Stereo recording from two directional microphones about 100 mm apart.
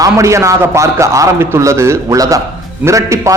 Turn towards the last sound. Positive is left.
turn(degrees=-30)  # may be behind; listen again after turning